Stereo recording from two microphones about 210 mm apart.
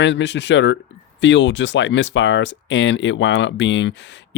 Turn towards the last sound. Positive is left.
turn(degrees=60)  # may be behind; listen again after turning